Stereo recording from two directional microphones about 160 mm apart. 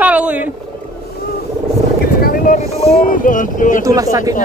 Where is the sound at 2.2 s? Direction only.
70° left (ahead or behind).